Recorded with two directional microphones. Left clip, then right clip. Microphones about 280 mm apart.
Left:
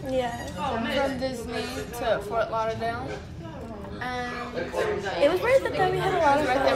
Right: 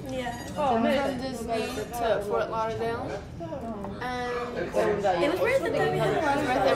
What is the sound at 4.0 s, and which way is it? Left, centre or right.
Speech, centre.